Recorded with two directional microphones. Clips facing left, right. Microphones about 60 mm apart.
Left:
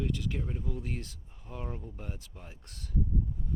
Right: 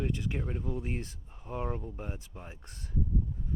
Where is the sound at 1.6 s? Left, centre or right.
Right.